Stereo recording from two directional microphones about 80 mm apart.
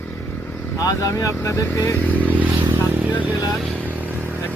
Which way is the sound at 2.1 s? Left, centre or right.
Centre.